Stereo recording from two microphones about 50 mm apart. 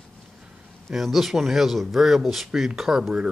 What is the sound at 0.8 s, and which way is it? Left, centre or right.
Speech, centre.